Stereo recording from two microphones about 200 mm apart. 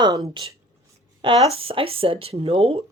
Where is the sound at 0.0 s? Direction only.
25° right (ahead or behind).